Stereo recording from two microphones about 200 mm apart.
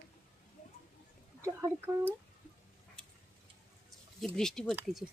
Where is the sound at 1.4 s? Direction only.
15° right (ahead or behind).